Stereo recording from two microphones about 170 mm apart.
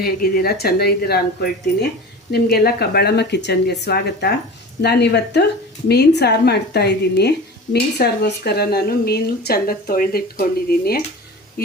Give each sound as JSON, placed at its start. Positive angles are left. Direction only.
{"t": 0.0, "sound": "speech", "side_deg": 60}